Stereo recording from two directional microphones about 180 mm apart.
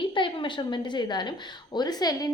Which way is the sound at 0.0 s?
25° left (ahead or behind).